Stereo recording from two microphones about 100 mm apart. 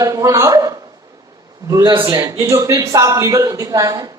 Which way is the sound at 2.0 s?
35° right (ahead or behind).